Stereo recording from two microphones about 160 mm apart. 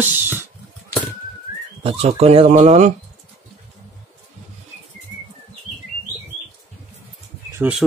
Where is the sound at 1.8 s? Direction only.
40° right (ahead or behind).